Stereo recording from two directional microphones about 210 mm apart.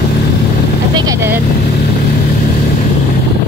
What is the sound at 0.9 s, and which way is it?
Vehicle, 20° right (ahead or behind).